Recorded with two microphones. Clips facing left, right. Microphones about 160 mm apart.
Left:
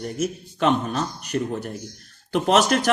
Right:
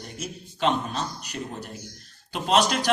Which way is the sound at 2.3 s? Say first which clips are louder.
Left 4 dB; 50° left (ahead or behind).